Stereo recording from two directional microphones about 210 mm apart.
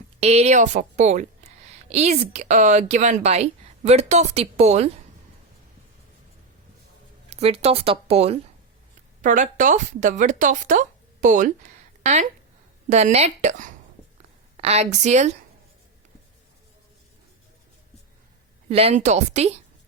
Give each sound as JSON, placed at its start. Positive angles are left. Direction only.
{"t": 0.2, "sound": "a woman's voice", "side_deg": -30}
{"t": 7.3, "sound": "a woman's voice", "side_deg": -30}
{"t": 18.7, "sound": "a woman's voice", "side_deg": -30}